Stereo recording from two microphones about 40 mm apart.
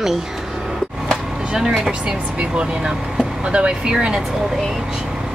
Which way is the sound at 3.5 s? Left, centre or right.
Right.